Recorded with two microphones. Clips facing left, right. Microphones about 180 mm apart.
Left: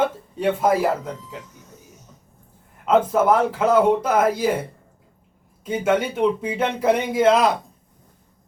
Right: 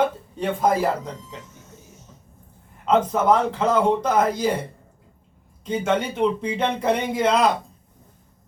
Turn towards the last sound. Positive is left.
turn(degrees=5)  # may be behind; listen again after turning